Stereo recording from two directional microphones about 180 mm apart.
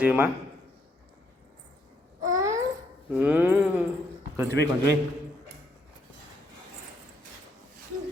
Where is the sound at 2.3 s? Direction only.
15° right (ahead or behind).